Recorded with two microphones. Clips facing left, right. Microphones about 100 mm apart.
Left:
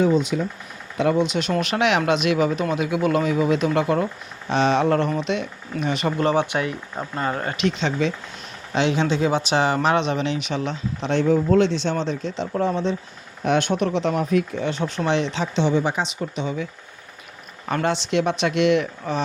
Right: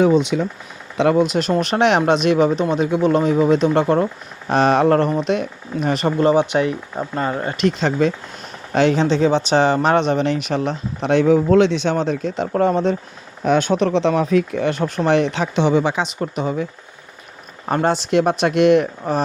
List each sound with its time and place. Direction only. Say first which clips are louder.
0.0 s speech: right 4 dB; 75° right (ahead or behind)
1.1 s speech: right 4 dB; 45° right (ahead or behind)
6.1 s speech: right 6 dB; 20° right (ahead or behind)
7.8 s speech: right 5 dB; 40° right (ahead or behind)
10.7 s speech: right 5 dB; 55° right (ahead or behind)
13.7 s speech: right 5 dB; 80° right
16.2 s speech: right 5 dB; 45° right (ahead or behind)
17.7 s speech: right 5 dB; 35° right (ahead or behind)